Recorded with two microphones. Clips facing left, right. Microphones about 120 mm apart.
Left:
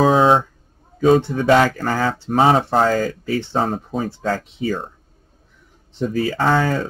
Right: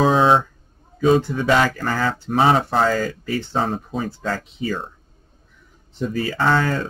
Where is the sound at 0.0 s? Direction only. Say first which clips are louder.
Left 2 dB; 45° left (ahead or behind).